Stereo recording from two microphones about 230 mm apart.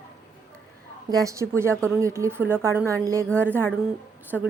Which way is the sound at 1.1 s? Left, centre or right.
Centre.